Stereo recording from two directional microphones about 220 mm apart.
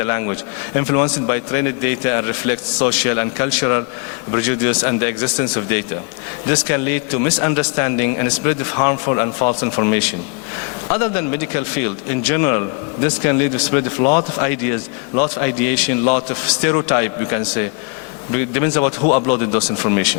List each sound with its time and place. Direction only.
0.0 s a man's voice: 20° left (ahead or behind)